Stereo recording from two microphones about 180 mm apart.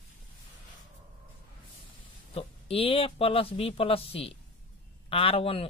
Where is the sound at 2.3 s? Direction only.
30° left (ahead or behind).